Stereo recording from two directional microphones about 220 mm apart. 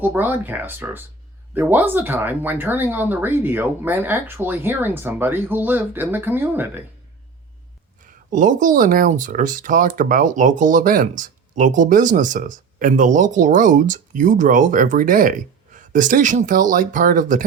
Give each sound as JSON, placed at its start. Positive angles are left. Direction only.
{"t": 0.0, "sound": "speech", "side_deg": -10}
{"t": 8.0, "sound": "speech", "side_deg": -35}